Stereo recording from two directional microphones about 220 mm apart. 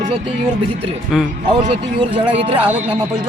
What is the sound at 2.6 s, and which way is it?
Speech, 5° right (ahead or behind).